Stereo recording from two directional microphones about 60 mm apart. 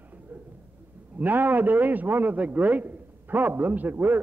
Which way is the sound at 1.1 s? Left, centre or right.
Right.